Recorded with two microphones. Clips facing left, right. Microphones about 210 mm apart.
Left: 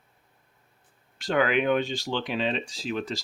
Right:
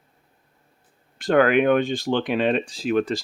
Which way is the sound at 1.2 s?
55° right (ahead or behind).